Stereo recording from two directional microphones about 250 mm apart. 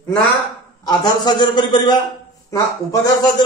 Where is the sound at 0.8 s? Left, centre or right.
Centre.